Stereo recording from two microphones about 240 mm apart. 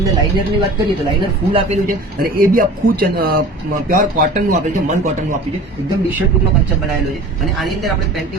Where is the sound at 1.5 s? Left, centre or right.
Right.